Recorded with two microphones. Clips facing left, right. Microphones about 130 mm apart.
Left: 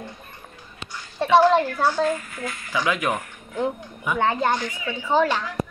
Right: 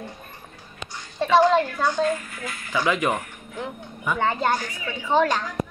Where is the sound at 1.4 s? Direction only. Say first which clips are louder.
Left 1 dB; 5° left (ahead or behind).